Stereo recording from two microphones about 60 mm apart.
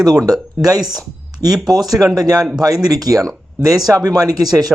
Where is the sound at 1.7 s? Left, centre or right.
Right.